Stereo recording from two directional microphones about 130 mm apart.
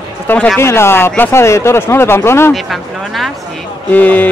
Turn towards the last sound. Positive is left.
turn(degrees=15)  # may be behind; listen again after turning